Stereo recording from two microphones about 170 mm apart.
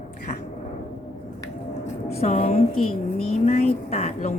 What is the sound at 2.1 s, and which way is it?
A woman's voice, 40° left (ahead or behind).